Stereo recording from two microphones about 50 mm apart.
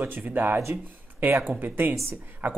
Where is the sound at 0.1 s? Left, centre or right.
Right.